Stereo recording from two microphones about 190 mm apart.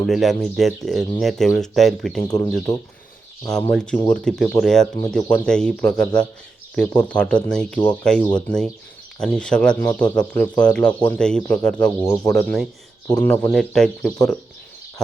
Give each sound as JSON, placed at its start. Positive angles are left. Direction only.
{"t": 0.0, "sound": "speech", "side_deg": 0}
{"t": 2.2, "sound": "speech", "side_deg": 20}
{"t": 3.7, "sound": "speech", "side_deg": 5}